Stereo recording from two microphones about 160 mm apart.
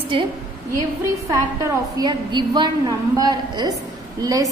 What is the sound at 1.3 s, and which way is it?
A woman's voice, 25° right (ahead or behind).